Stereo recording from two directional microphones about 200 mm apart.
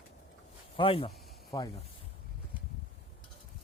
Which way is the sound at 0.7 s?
25° left (ahead or behind).